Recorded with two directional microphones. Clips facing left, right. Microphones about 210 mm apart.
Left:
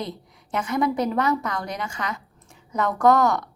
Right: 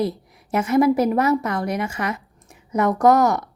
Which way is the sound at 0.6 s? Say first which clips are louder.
Right 7 dB; 25° right (ahead or behind).